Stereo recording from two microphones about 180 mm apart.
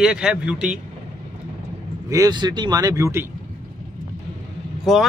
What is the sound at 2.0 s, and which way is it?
Speech, 20° right (ahead or behind).